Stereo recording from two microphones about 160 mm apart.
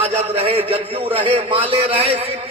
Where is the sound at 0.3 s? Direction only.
35° right (ahead or behind).